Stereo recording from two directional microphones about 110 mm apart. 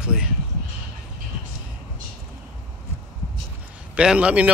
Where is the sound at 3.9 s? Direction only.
10° right (ahead or behind).